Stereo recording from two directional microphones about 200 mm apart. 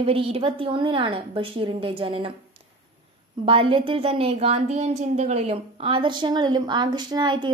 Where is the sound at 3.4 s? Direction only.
25° right (ahead or behind).